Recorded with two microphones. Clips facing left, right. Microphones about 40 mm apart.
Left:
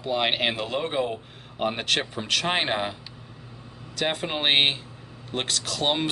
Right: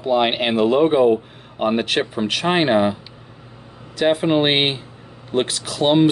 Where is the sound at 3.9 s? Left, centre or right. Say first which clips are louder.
Right 11 dB; centre.